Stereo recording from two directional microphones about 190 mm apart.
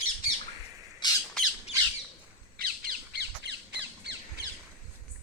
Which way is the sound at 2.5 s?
50° right (ahead or behind).